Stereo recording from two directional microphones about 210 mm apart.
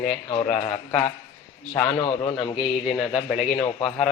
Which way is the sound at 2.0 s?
25° left (ahead or behind).